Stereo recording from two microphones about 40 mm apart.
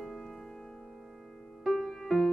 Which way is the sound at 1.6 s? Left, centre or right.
Centre.